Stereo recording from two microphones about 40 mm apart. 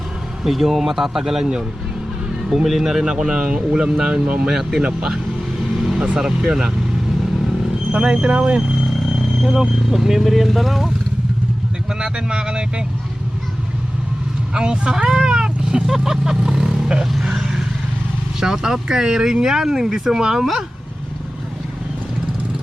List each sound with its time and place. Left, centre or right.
0.4 s speech: centre
2.6 s speech: centre; by 5.0 s right
6.0 s speech: centre
7.9 s speech: right
9.1 s speech: centre
11.9 s speech: centre
14.5 s speech: right
17.2 s vehicle: centre
18.3 s speech: centre